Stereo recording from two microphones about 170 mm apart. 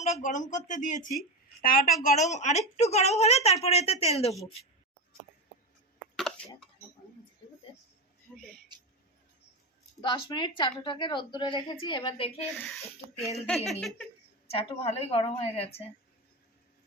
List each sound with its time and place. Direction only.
0.0 s a woman's voice: 45° left (ahead or behind)
6.1 s a sound: 5° left (ahead or behind)
8.7 s a sound: 25° right (ahead or behind)
10.0 s speech: 25° left (ahead or behind)
12.5 s giggle: 5° left (ahead or behind)
14.5 s a woman's voice: 35° left (ahead or behind)